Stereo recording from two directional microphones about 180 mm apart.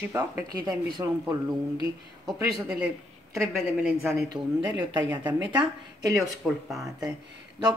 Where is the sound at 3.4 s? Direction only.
15° right (ahead or behind).